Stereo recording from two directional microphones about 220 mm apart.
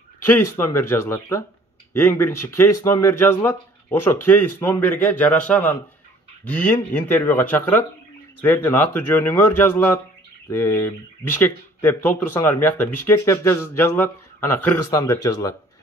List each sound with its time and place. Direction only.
0.2 s speech: 10° left (ahead or behind)